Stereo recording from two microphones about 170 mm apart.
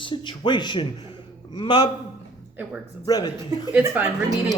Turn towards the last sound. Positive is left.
turn(degrees=-5)  # may be behind; listen again after turning